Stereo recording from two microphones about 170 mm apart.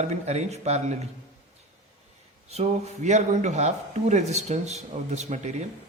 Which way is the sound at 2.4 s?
40° right (ahead or behind).